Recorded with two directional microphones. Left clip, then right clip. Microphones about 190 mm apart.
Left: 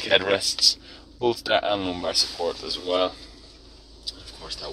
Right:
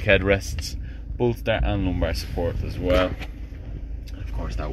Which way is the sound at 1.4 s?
30° left (ahead or behind).